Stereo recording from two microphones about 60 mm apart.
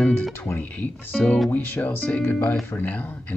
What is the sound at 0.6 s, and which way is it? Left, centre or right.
Speech, left.